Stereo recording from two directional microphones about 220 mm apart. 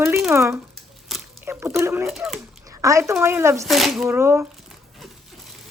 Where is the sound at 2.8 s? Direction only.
15° right (ahead or behind).